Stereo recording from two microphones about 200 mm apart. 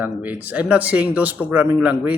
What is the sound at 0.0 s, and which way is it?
Speech, 10° right (ahead or behind).